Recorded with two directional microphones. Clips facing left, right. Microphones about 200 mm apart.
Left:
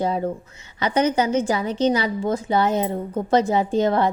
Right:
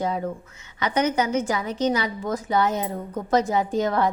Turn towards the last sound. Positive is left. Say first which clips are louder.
# left 3 dB
turn(degrees=30)  # may be behind; listen again after turning